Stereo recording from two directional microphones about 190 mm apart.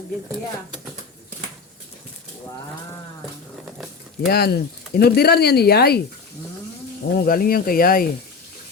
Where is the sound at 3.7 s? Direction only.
5° right (ahead or behind).